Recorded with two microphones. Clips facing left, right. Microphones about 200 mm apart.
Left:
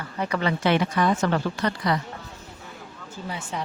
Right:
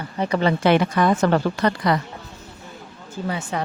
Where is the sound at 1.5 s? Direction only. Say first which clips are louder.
Right 5 dB; 70° right (ahead or behind).